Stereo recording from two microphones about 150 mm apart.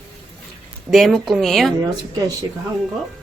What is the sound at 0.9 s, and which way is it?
Speech, centre (ahead or behind).